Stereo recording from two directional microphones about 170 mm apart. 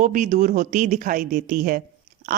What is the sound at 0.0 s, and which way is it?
A woman's voice, 50° right (ahead or behind).